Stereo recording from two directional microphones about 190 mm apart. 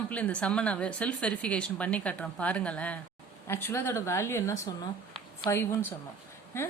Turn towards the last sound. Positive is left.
turn(degrees=15)  # may be behind; listen again after turning